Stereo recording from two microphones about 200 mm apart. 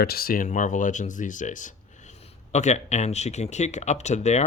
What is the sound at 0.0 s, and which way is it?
Speech, 50° left (ahead or behind).